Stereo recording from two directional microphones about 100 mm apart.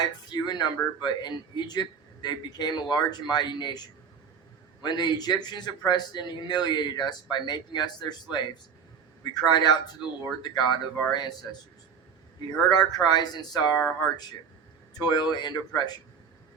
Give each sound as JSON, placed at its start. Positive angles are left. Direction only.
{"t": 0.0, "sound": "speech", "side_deg": 45}
{"t": 12.5, "sound": "speech", "side_deg": 40}
{"t": 14.9, "sound": "speech", "side_deg": 45}